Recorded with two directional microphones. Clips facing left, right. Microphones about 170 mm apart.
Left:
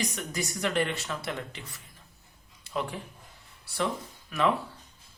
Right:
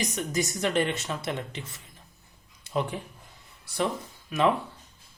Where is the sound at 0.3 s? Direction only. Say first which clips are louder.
Right 3 dB; 20° right (ahead or behind).